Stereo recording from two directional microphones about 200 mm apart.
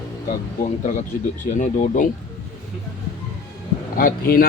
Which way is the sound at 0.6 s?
40° left (ahead or behind).